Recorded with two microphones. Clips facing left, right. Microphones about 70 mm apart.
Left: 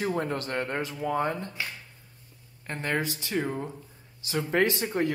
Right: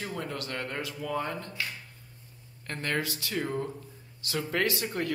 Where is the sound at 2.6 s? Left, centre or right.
Centre.